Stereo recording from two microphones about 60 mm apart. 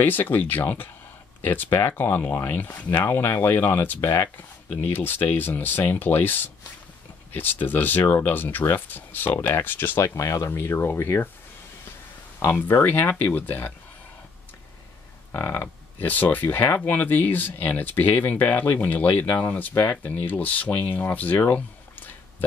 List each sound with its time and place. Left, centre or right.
0.0 s speech: left
2.9 s speech: left
10.0 s speech: left
10.5 s speech: left
12.6 s speech: left
15.3 s speech: left
19.7 s speech: left
20.1 s speech: left